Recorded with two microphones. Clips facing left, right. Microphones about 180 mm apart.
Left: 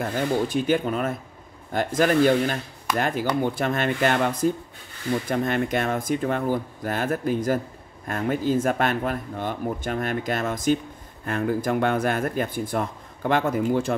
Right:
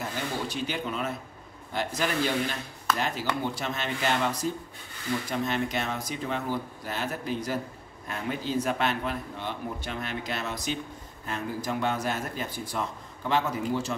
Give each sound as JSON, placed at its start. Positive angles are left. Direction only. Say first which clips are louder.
{"t": 0.0, "sound": "speech", "louder": "left 8 dB", "side_deg": 50}